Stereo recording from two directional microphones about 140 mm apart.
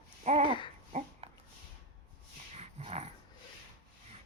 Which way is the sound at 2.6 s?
50° right (ahead or behind).